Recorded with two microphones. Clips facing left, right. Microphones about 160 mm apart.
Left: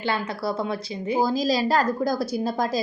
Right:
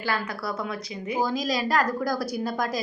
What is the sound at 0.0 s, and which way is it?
A woman's voice, 25° left (ahead or behind).